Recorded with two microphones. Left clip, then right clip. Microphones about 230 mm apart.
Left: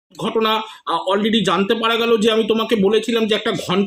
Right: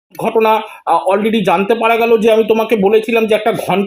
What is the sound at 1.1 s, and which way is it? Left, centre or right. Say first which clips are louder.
Speech: right 5 dB; centre.